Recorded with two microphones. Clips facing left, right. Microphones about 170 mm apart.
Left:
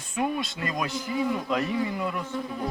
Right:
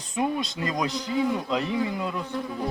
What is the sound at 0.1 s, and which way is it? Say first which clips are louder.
A man's voice: right 1 dB; 20° right (ahead or behind).